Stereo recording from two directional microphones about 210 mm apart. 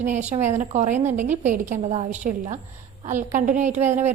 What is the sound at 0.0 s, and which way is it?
A woman's voice, 35° right (ahead or behind).